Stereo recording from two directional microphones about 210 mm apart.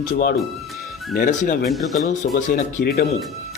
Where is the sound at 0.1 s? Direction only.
45° left (ahead or behind).